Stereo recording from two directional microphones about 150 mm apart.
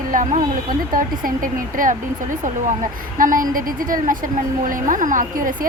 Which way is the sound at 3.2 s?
65° right (ahead or behind).